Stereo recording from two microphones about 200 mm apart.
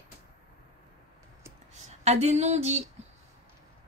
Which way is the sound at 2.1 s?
35° right (ahead or behind).